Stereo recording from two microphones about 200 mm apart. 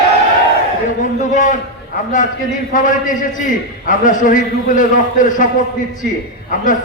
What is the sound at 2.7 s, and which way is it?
A man's voice, 40° left (ahead or behind).